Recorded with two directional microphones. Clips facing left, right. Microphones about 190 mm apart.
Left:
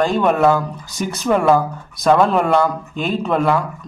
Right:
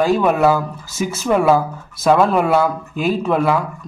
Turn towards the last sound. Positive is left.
turn(degrees=-5)  # may be behind; listen again after turning